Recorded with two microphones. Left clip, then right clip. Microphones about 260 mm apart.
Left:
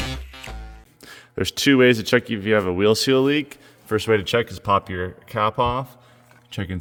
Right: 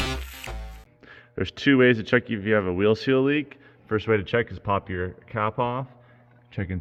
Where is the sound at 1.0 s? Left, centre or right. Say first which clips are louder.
Left 5 dB; left.